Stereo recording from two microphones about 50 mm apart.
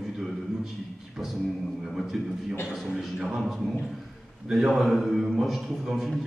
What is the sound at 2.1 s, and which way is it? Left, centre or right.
A man's voice, centre.